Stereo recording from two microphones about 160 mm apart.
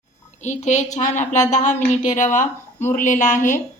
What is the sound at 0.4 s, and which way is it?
A woman's voice, 45° left (ahead or behind).